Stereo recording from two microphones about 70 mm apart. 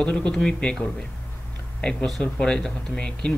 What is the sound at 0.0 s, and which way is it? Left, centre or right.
Speech, centre.